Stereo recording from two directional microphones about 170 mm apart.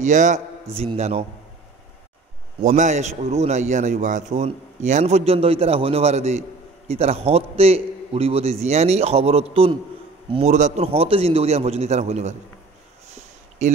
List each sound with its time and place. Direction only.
0.0 s a man's voice: 45° right (ahead or behind)
2.6 s a man's voice: 45° right (ahead or behind)